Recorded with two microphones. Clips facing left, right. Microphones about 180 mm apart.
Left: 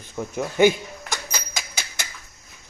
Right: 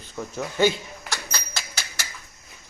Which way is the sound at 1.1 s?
15° left (ahead or behind).